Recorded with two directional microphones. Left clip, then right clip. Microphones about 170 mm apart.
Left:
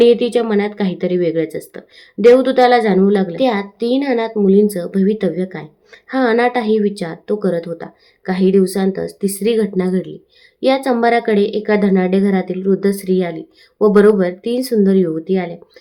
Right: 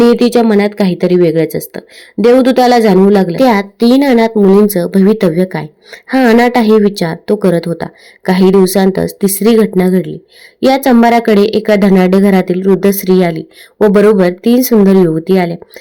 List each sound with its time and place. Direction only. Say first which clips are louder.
0.0 s a woman's voice: right 3 dB; 40° right (ahead or behind)